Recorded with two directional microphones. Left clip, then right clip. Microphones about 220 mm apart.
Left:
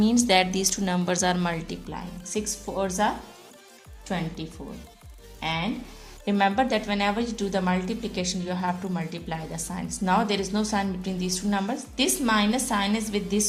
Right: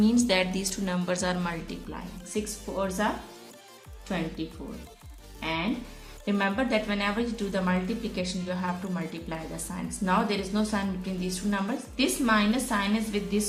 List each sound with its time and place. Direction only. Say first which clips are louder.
0.0 s a woman's voice: left 4 dB; 45° left (ahead or behind)
4.1 s a woman's voice: left 1 dB; 40° left (ahead or behind)
6.2 s a woman's voice: left 5 dB; 45° left (ahead or behind)